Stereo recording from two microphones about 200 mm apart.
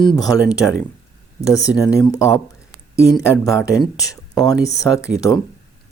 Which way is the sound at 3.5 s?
15° left (ahead or behind).